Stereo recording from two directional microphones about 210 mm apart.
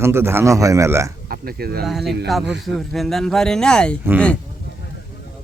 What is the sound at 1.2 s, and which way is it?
Speech, 45° right (ahead or behind).